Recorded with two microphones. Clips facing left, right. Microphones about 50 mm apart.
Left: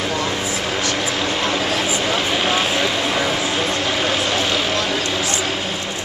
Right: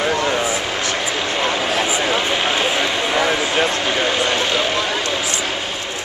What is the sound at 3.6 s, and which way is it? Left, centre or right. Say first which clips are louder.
Vehicle: right 2 dB; centre.